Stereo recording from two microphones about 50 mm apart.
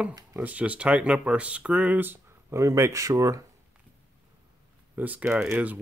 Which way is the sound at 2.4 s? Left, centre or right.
Right.